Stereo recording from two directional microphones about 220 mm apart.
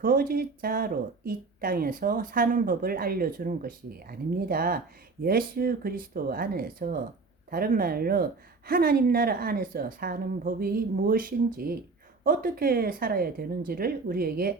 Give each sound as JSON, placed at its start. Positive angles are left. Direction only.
{"t": 0.0, "sound": "speech", "side_deg": -40}